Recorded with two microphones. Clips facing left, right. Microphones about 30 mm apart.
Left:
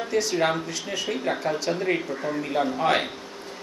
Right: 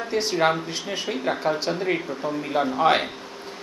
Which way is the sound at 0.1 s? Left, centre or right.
Right.